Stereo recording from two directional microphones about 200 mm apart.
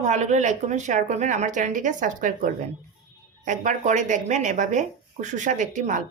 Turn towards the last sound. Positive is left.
turn(degrees=-40)  # may be behind; listen again after turning